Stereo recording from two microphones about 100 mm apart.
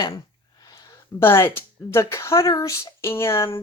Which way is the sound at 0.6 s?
40° left (ahead or behind).